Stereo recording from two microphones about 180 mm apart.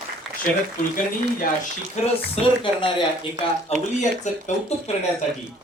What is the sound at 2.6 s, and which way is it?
Speech, 30° left (ahead or behind).